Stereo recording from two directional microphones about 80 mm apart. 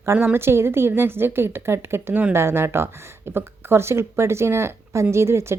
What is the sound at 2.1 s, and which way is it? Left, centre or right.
Speech, right.